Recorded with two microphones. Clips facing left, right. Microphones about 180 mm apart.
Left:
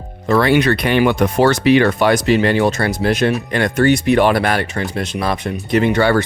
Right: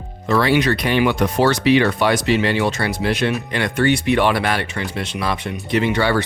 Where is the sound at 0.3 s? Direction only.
50° left (ahead or behind).